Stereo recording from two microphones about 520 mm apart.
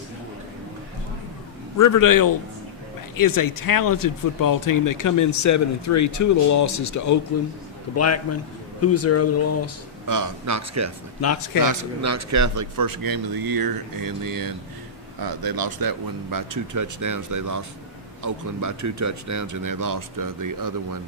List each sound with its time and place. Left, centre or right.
1.8 s speech: left
10.1 s speech: right